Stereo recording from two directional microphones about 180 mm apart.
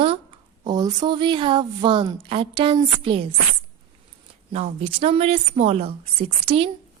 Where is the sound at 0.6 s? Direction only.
20° right (ahead or behind).